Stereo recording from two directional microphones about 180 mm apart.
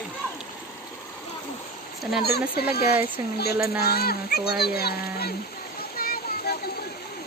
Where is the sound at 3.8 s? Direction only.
60° left (ahead or behind).